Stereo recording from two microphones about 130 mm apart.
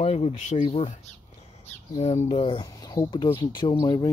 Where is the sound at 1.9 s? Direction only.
60° left (ahead or behind).